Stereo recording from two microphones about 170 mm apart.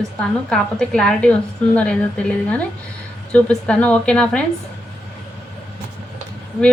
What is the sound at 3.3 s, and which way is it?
A woman's voice, 5° left (ahead or behind).